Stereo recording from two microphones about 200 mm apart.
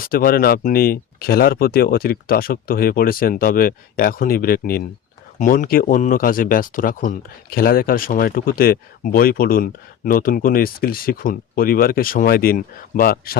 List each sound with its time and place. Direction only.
0.0 s speech: 45° left (ahead or behind)